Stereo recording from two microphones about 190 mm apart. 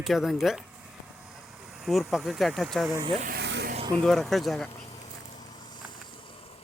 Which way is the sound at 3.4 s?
65° right (ahead or behind).